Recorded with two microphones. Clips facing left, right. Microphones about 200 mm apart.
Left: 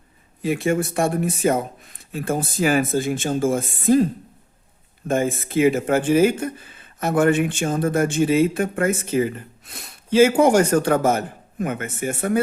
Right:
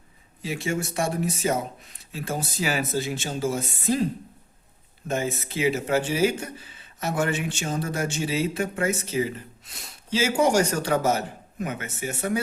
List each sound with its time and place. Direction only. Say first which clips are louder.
0.4 s speech: left 8 dB; 55° left (ahead or behind)
5.0 s speech: left 6 dB; 50° left (ahead or behind)